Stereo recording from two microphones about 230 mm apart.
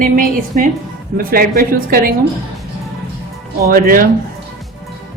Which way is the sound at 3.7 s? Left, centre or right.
Right.